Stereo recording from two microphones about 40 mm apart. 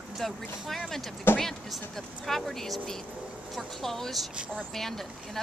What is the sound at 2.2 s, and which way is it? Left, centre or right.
Speech, centre.